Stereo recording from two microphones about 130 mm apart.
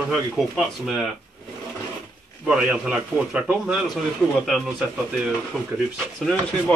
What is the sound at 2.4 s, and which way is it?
A man's voice, 10° right (ahead or behind).